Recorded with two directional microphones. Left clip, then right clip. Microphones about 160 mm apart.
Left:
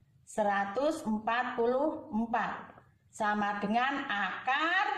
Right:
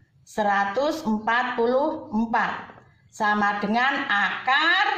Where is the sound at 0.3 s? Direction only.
30° left (ahead or behind).